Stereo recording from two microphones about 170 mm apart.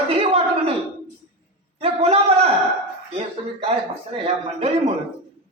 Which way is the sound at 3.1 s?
35° right (ahead or behind).